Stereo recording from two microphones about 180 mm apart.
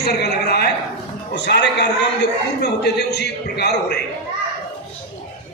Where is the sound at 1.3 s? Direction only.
75° left (ahead or behind).